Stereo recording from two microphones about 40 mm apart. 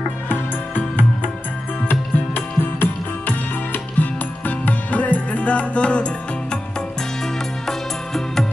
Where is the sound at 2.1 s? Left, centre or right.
Left.